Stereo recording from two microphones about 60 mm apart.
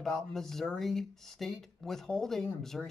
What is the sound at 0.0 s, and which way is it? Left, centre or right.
Speech, centre.